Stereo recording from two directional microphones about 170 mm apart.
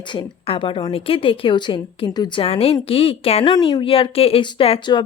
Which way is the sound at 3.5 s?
25° left (ahead or behind).